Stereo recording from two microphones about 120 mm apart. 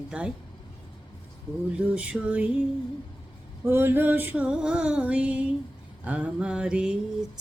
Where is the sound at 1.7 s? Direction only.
10° right (ahead or behind).